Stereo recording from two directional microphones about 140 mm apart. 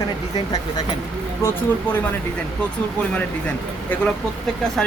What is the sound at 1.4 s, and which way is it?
Speech, 20° left (ahead or behind).